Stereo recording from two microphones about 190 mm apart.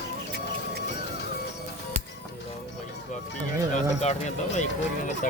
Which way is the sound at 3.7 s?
35° left (ahead or behind).